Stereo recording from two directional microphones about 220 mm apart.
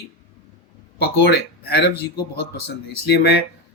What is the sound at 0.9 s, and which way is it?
Speech, 45° left (ahead or behind).